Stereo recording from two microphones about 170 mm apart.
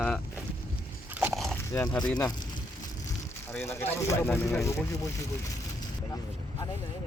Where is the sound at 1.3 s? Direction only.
Centre (ahead or behind).